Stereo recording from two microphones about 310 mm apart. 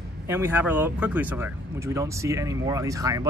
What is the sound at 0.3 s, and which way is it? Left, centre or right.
Speech, centre.